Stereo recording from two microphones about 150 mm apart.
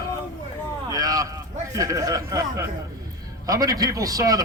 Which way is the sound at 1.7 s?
20° right (ahead or behind).